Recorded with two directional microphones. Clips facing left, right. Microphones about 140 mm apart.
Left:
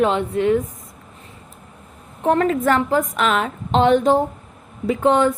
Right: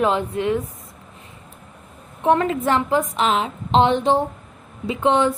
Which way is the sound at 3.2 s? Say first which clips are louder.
Left 1 dB; 55° left (ahead or behind).